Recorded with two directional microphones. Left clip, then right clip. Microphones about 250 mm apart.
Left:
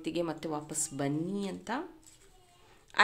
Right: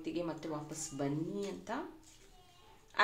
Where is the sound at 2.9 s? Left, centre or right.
Left.